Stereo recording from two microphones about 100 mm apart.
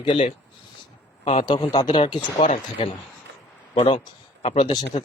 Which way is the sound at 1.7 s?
45° left (ahead or behind).